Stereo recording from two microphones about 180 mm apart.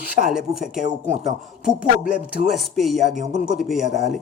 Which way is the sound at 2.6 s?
Centre (ahead or behind).